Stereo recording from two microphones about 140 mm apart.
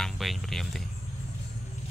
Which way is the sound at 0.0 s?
Centre (ahead or behind).